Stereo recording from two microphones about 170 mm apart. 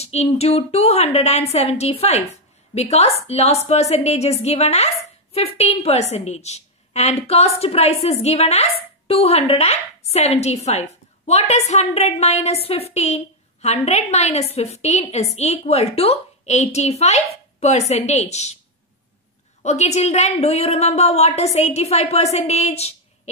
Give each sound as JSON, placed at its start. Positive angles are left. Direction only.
{"t": 0.0, "sound": "a woman's voice", "side_deg": 40}
{"t": 19.6, "sound": "a woman's voice", "side_deg": 40}